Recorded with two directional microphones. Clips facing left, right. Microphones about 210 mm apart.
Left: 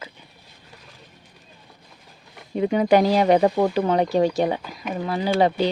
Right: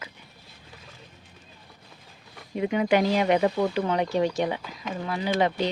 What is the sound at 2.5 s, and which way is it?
Speech, 35° left (ahead or behind).